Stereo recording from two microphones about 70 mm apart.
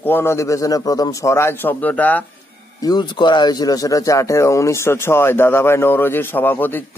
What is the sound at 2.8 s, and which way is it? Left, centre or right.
Speech, left.